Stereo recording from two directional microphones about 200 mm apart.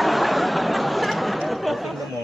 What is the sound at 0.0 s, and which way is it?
Chatter, centre (ahead or behind).